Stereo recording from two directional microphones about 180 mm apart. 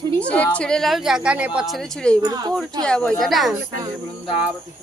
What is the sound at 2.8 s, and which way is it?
Speech, 5° left (ahead or behind).